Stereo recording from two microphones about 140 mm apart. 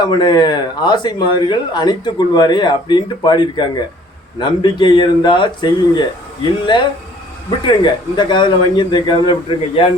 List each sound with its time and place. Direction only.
0.0 s speech: 30° left (ahead or behind)
7.6 s speech: 35° left (ahead or behind)